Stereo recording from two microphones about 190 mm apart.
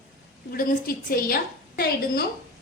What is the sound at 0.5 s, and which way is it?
A woman's voice, 50° left (ahead or behind).